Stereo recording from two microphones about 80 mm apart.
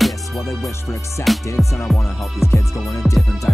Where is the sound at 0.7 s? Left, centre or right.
Left.